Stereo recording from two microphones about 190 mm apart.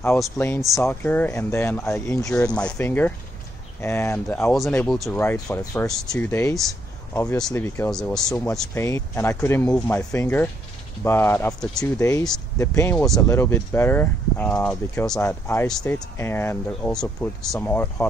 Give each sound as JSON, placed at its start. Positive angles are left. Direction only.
{"t": 0.6, "sound": "speech", "side_deg": 0}
{"t": 5.2, "sound": "speech", "side_deg": 15}
{"t": 8.5, "sound": "speech", "side_deg": 15}
{"t": 12.9, "sound": "speech", "side_deg": 0}
{"t": 13.3, "sound": "speech", "side_deg": 15}